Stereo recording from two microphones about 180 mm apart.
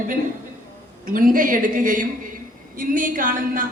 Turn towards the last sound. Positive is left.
turn(degrees=-50)  # may be behind; listen again after turning